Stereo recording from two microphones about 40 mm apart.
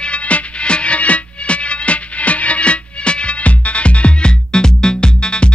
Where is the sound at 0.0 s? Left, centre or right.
Left.